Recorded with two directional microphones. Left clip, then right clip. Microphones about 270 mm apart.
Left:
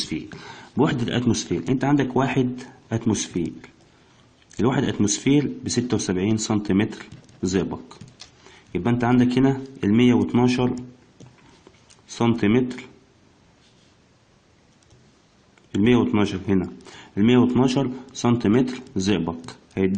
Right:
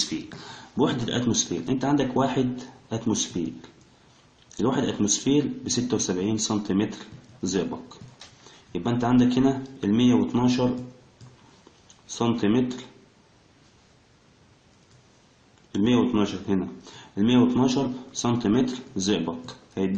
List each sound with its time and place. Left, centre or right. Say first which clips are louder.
0.4 s speech: left 3 dB; left
4.5 s speech: left 2 dB; left
12.1 s speech: left 3 dB; left
15.8 s speech: left 3 dB; left